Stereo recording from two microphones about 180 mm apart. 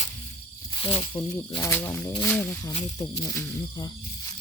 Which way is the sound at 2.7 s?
30° left (ahead or behind).